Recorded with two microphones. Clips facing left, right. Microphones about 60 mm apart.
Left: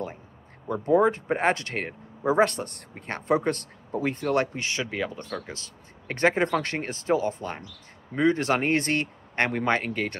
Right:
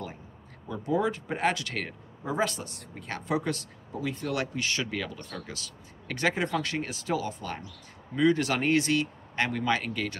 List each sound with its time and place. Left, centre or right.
0.7 s speech: left
2.2 s speech: left
3.0 s speech: left
8.8 s speech: left